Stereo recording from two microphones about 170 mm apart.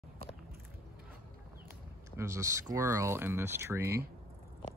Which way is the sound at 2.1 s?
15° right (ahead or behind).